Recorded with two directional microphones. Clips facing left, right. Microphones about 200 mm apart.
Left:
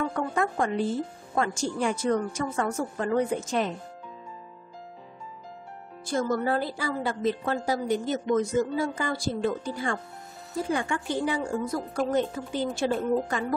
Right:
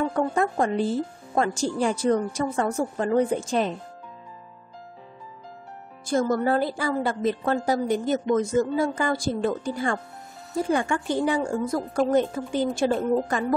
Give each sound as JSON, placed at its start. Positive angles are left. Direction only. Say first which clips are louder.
{"t": 0.1, "sound": "a woman's voice", "louder": "right 4 dB", "side_deg": -35}
{"t": 6.0, "sound": "a woman's voice", "louder": "right 4 dB", "side_deg": -45}